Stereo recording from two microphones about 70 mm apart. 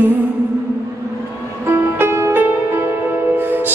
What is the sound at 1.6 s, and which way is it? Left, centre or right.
Music, right.